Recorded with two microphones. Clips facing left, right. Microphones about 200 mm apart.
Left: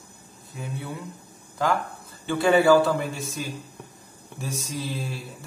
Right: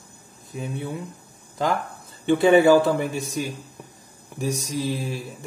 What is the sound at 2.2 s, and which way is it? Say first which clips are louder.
Speech: right 4 dB; 20° right (ahead or behind).